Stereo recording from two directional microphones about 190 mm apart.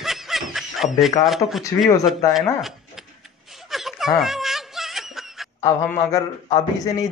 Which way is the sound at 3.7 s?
Centre (ahead or behind).